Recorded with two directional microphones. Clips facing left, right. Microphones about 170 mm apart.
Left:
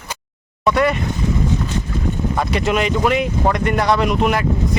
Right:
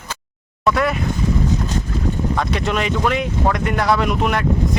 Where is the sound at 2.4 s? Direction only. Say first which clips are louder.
Left 5 dB; 5° left (ahead or behind).